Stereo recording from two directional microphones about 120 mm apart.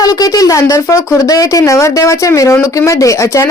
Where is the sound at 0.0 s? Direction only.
30° left (ahead or behind).